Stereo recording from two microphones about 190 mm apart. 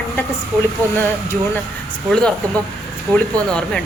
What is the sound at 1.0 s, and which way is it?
Speech, 10° left (ahead or behind).